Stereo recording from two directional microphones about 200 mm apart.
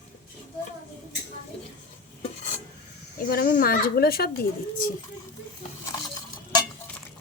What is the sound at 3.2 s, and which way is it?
Speech, 45° left (ahead or behind).